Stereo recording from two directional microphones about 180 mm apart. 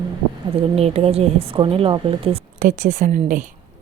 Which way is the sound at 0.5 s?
35° right (ahead or behind).